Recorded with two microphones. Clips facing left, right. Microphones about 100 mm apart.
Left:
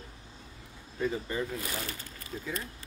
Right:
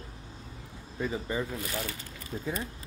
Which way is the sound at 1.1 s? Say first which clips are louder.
Right 1 dB; 10° right (ahead or behind).